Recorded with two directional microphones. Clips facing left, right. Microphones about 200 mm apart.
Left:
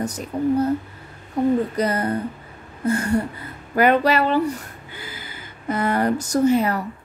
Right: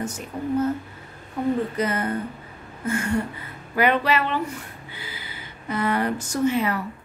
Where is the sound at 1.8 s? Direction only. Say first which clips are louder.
Left 3 dB; 35° left (ahead or behind).